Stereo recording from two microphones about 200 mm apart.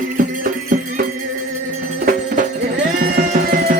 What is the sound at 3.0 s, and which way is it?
Music, 45° right (ahead or behind).